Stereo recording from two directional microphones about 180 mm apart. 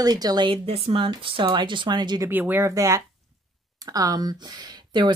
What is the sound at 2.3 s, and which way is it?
Speech, 10° right (ahead or behind).